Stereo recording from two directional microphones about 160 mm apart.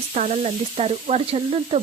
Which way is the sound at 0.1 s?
45° right (ahead or behind).